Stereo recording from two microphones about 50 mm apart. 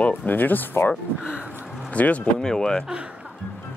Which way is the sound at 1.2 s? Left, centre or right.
Right.